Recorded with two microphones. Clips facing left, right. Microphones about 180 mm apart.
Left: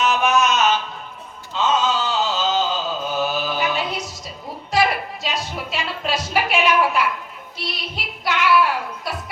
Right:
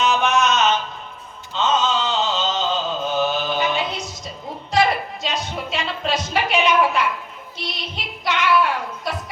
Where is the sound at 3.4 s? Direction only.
20° right (ahead or behind).